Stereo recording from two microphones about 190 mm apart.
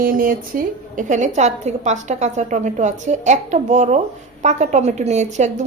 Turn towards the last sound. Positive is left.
turn(degrees=-40)  # may be behind; listen again after turning